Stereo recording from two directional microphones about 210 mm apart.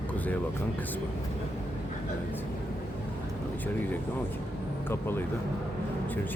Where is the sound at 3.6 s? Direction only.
10° left (ahead or behind).